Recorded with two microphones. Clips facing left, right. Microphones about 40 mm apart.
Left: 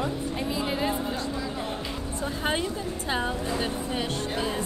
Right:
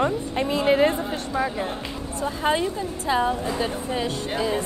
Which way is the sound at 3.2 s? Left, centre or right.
Centre.